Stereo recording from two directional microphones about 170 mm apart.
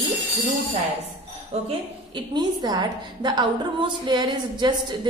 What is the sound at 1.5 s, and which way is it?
Speech, 35° right (ahead or behind).